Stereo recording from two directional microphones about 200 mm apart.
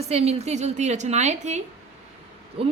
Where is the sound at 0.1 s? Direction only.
30° right (ahead or behind).